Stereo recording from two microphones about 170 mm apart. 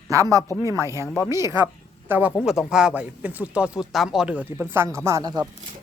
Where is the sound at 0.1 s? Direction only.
20° right (ahead or behind).